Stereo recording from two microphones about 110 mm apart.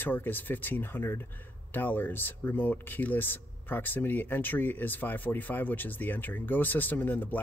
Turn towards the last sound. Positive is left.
turn(degrees=15)  # may be behind; listen again after turning